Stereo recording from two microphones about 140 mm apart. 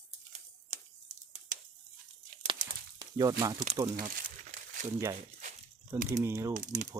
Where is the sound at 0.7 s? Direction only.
55° right (ahead or behind).